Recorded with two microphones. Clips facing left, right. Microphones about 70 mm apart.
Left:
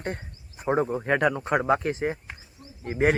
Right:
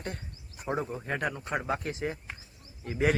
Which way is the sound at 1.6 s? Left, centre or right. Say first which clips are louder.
Left 9 dB; left.